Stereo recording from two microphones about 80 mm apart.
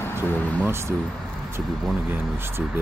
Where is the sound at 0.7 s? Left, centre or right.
Right.